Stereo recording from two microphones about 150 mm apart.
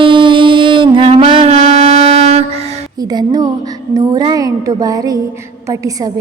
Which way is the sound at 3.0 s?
25° right (ahead or behind).